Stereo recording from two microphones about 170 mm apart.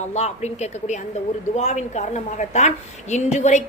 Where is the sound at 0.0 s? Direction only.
40° left (ahead or behind).